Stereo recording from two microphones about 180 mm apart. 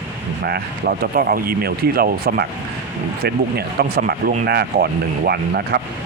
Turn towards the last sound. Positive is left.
turn(degrees=-60)  # may be behind; listen again after turning